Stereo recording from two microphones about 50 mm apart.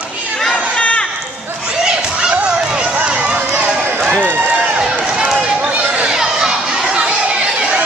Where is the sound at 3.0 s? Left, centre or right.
Right.